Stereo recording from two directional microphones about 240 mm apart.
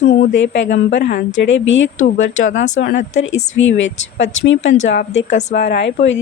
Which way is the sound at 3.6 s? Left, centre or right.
Left.